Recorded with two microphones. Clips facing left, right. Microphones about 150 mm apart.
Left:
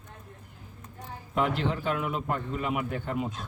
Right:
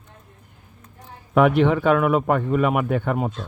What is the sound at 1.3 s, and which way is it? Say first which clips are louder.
Speech: right 11 dB; 65° right (ahead or behind).